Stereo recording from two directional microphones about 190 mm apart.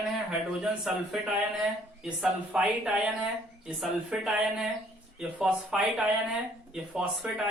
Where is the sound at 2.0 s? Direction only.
5° right (ahead or behind).